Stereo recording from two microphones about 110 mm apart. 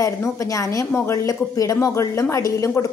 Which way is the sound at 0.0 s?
30° left (ahead or behind).